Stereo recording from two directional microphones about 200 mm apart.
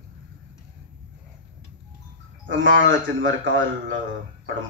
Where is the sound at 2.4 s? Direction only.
65° right (ahead or behind).